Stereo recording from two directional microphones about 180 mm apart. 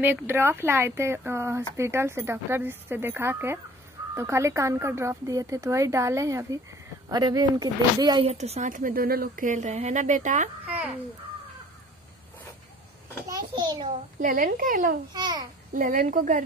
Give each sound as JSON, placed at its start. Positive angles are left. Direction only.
{"t": 0.0, "sound": "speech", "side_deg": -10}
{"t": 10.6, "sound": "babbling", "side_deg": -10}
{"t": 13.3, "sound": "a sound", "side_deg": -25}
{"t": 14.2, "sound": "speech", "side_deg": -50}
{"t": 15.1, "sound": "a child's voice", "side_deg": -25}
{"t": 15.7, "sound": "speech", "side_deg": -50}